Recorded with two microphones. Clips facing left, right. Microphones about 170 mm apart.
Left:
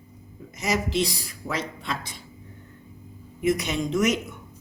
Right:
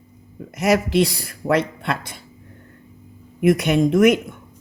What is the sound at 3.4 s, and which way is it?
Speech, 60° right (ahead or behind).